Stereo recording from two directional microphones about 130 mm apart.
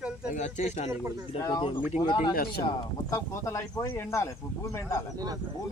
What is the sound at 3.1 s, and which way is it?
Speech, 20° left (ahead or behind).